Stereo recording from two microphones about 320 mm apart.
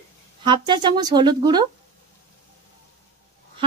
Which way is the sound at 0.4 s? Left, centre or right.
Centre.